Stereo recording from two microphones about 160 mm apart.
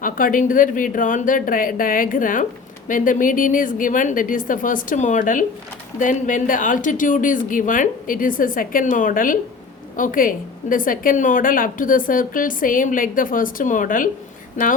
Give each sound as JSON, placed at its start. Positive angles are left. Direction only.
{"t": 0.0, "sound": "speech", "side_deg": 60}